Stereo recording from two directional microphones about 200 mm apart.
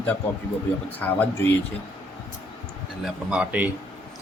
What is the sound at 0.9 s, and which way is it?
Speech, 10° left (ahead or behind).